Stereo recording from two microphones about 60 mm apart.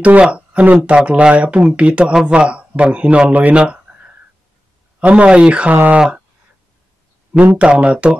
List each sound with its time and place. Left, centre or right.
0.0 s a man's voice: right
5.0 s a man's voice: right
7.5 s a man's voice: centre